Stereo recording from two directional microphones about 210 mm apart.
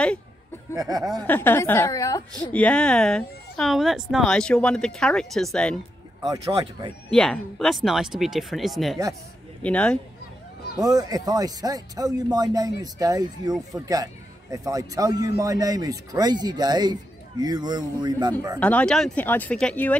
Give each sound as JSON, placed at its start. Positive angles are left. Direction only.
{"t": 0.7, "sound": "speech", "side_deg": -15}
{"t": 1.2, "sound": "a woman's voice", "side_deg": 10}
{"t": 6.2, "sound": "speech", "side_deg": -20}
{"t": 7.1, "sound": "a woman's voice", "side_deg": 5}
{"t": 10.8, "sound": "speech", "side_deg": -15}
{"t": 18.6, "sound": "speech", "side_deg": 5}